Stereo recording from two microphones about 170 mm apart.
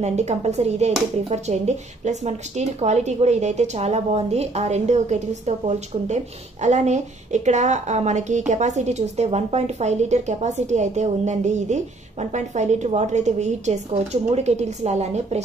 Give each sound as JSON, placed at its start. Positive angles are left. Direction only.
{"t": 0.0, "sound": "speech", "side_deg": -40}